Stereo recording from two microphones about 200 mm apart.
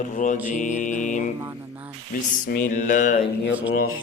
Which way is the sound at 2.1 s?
45° left (ahead or behind).